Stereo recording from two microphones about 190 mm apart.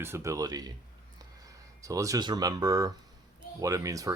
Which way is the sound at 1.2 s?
20° right (ahead or behind).